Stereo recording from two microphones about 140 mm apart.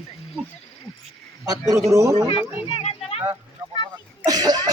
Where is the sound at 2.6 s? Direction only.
40° left (ahead or behind).